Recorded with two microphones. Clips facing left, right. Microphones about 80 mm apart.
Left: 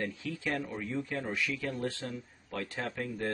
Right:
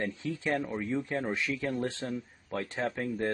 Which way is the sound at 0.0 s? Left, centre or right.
Right.